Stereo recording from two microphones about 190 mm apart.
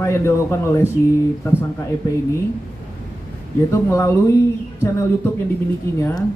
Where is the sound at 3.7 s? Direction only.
15° left (ahead or behind).